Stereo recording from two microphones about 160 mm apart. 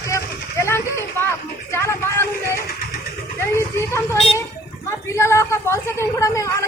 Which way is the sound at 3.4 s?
15° left (ahead or behind).